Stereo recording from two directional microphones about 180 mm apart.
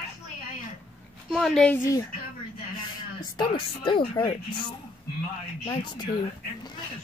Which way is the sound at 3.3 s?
25° left (ahead or behind).